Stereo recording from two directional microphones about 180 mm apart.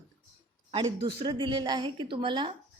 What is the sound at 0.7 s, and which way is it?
A woman's voice, 25° right (ahead or behind).